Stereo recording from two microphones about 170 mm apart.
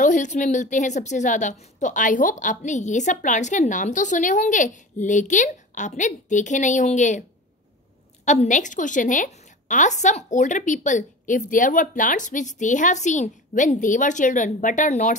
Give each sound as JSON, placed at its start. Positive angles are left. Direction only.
{"t": 0.0, "sound": "a woman's voice", "side_deg": 45}
{"t": 8.3, "sound": "a woman's voice", "side_deg": 45}